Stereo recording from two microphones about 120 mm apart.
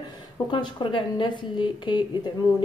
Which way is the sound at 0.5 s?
40° left (ahead or behind).